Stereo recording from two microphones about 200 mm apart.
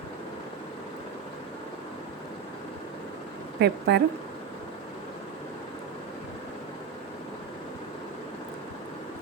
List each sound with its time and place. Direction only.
3.6 s speech: 55° right (ahead or behind)